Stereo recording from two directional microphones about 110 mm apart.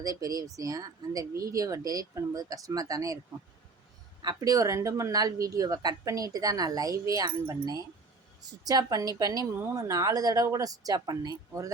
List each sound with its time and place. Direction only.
0.0 s speech: 35° right (ahead or behind)
4.2 s speech: 40° right (ahead or behind)